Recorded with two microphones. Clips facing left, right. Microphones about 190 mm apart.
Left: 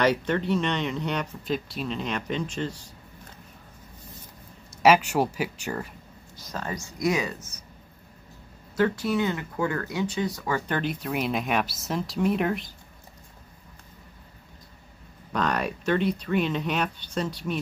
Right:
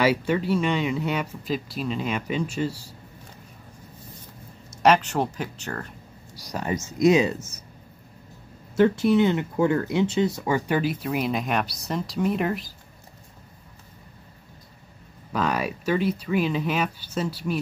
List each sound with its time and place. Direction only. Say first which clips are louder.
0.0 s speech: right 2 dB; 5° right (ahead or behind)
4.8 s speech: even; 10° left (ahead or behind)
6.5 s speech: right 5 dB; 20° right (ahead or behind)
8.7 s speech: right 6 dB; 25° right (ahead or behind)
10.7 s speech: right 4 dB; 5° right (ahead or behind)
15.3 s speech: right 1 dB; 5° right (ahead or behind)